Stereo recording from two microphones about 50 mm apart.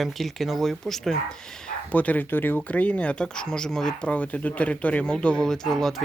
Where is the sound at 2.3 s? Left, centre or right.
Left.